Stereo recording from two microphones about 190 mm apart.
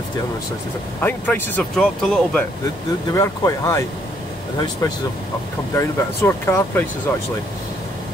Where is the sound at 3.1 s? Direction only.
15° left (ahead or behind).